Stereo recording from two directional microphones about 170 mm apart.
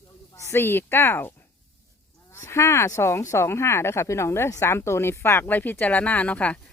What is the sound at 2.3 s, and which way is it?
Speech, 15° left (ahead or behind).